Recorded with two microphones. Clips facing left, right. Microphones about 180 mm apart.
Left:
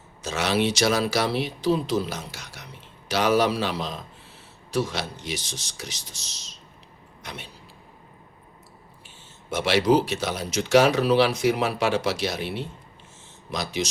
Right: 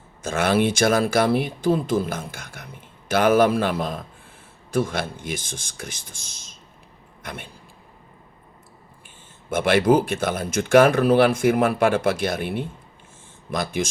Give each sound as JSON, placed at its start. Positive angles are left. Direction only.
{"t": 0.2, "sound": "speech", "side_deg": -50}
{"t": 7.2, "sound": "a sound", "side_deg": -50}
{"t": 9.5, "sound": "speech", "side_deg": -50}